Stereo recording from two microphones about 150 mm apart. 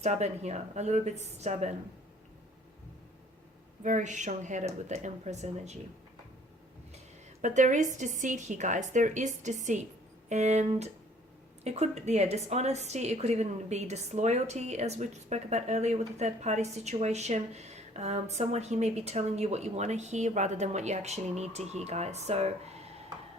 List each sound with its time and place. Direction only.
0.0 s a woman's voice: 50° right (ahead or behind)
3.8 s a woman's voice: 55° right (ahead or behind)
7.4 s a woman's voice: 55° right (ahead or behind)